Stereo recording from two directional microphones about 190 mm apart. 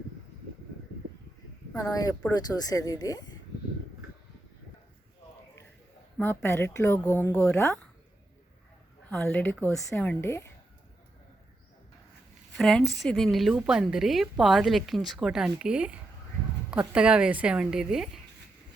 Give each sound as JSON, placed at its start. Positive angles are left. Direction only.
{"t": 1.7, "sound": "speech", "side_deg": 20}
{"t": 6.1, "sound": "a woman's voice", "side_deg": 10}
{"t": 9.0, "sound": "a woman's voice", "side_deg": 10}
{"t": 12.5, "sound": "a woman's voice", "side_deg": 0}